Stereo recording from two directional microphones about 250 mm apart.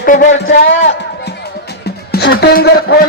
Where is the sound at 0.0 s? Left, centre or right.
Left.